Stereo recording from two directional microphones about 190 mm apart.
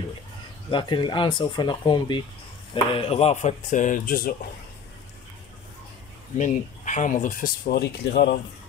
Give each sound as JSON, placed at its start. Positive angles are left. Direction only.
{"t": 0.7, "sound": "speech", "side_deg": 25}
{"t": 6.3, "sound": "speech", "side_deg": 40}